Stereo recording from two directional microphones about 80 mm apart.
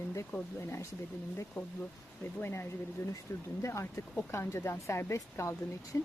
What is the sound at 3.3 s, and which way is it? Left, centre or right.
A woman's voice, left.